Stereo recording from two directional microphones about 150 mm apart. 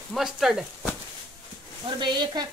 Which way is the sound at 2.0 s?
30° right (ahead or behind).